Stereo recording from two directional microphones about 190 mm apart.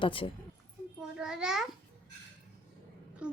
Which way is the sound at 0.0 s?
25° left (ahead or behind).